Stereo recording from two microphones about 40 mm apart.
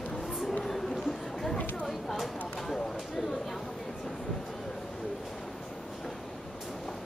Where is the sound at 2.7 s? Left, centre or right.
Centre.